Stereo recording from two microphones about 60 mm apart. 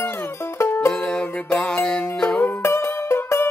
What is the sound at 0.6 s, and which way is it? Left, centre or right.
Music, left.